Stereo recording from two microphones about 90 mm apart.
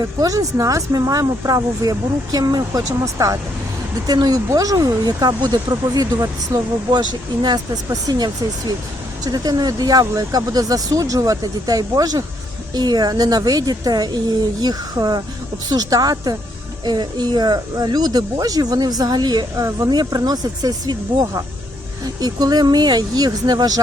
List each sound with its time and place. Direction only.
0.0 s speech: 40° right (ahead or behind)
6.9 s speech: 55° right (ahead or behind)